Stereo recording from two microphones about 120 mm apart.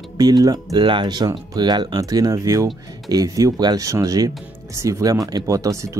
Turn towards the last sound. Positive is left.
turn(degrees=-25)  # may be behind; listen again after turning